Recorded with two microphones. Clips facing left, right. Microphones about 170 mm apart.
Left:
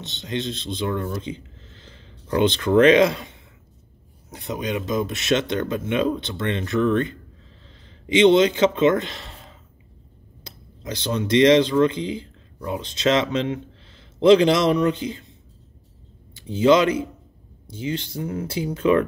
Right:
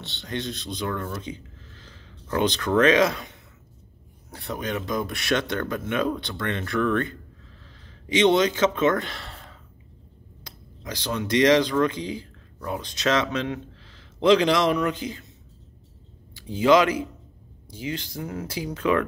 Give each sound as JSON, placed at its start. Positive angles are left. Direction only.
{"t": 0.0, "sound": "a man's voice", "side_deg": 20}
{"t": 12.8, "sound": "speech", "side_deg": 25}
{"t": 16.3, "sound": "speech", "side_deg": 25}